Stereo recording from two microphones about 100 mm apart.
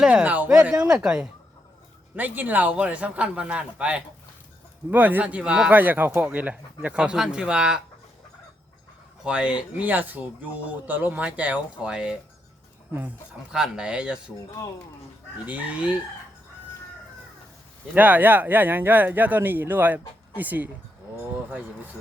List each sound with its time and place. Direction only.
0.0 s speech: 10° right (ahead or behind)
2.1 s speech: 15° right (ahead or behind)
9.2 s speech: 10° right (ahead or behind)
13.5 s speech: 5° right (ahead or behind)
15.4 s speech: 15° right (ahead or behind)
17.9 s speech: 15° right (ahead or behind)